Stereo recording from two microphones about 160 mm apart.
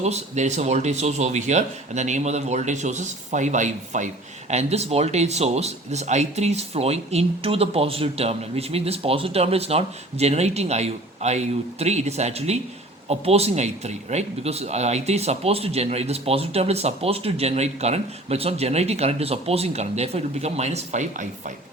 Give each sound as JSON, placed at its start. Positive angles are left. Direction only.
{"t": 0.0, "sound": "speech", "side_deg": -45}